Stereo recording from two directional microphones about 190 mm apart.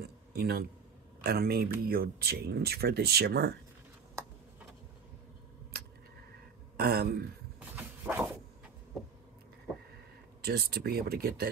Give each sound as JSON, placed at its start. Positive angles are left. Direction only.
{"t": 0.0, "sound": "speech", "side_deg": -55}
{"t": 6.8, "sound": "a man's voice", "side_deg": -55}
{"t": 7.7, "sound": "a sound", "side_deg": -10}
{"t": 10.4, "sound": "speech", "side_deg": -55}